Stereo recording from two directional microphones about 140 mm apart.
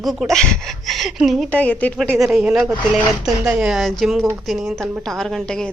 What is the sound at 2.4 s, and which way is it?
A woman's voice, 10° right (ahead or behind).